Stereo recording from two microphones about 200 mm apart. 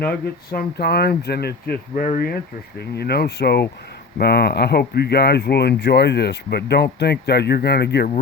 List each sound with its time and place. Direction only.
0.0 s speech: 50° left (ahead or behind)